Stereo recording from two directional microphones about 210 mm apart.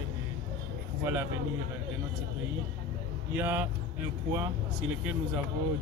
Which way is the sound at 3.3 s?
10° right (ahead or behind).